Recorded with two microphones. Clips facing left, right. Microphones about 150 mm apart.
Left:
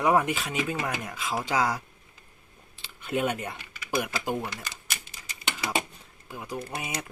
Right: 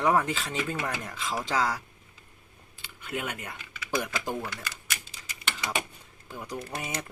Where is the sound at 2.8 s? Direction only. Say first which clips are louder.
Left 7 dB; 25° left (ahead or behind).